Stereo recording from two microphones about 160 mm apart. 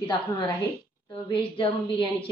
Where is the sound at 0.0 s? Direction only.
30° left (ahead or behind).